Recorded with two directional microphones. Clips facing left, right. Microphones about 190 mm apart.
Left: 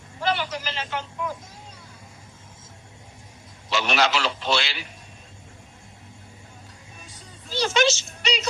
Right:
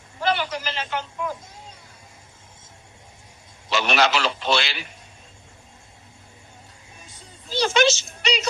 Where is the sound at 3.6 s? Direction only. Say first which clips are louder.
Right 2 dB; 60° right (ahead or behind).